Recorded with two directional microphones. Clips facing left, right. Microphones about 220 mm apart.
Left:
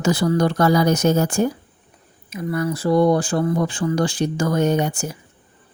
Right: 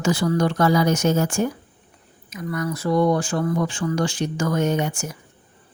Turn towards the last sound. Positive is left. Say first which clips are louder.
# left 3 dB
turn(degrees=35)  # may be behind; listen again after turning